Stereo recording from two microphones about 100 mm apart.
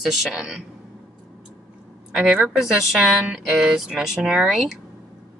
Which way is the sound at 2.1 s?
10° right (ahead or behind).